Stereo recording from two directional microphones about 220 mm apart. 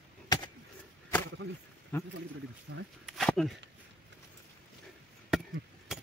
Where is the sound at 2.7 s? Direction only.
50° right (ahead or behind).